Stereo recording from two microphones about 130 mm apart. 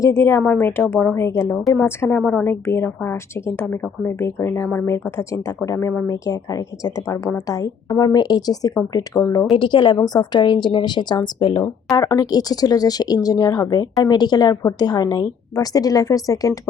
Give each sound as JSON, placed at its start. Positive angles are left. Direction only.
{"t": 0.0, "sound": "a woman's voice", "side_deg": 20}